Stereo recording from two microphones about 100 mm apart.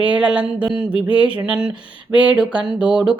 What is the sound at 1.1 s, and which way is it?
Speech, 10° right (ahead or behind).